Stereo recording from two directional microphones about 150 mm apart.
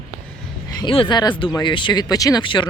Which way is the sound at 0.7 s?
35° left (ahead or behind).